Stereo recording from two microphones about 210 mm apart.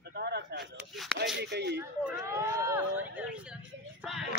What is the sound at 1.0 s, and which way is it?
Speech, centre (ahead or behind).